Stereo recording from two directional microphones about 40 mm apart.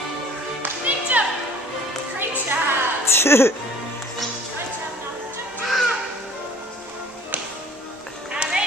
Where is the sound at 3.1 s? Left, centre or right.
Left.